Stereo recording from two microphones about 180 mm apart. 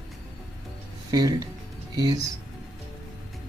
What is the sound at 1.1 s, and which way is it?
Speech, 20° right (ahead or behind).